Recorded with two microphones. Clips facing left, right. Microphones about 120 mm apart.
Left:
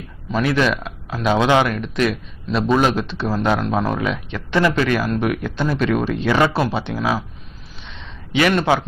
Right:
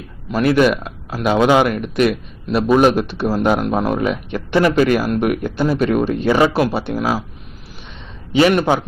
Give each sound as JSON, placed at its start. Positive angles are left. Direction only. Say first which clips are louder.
{"t": 0.3, "sound": "a man's voice", "louder": "right 4 dB", "side_deg": -10}
{"t": 8.4, "sound": "a man's voice", "louder": "right 3 dB", "side_deg": -15}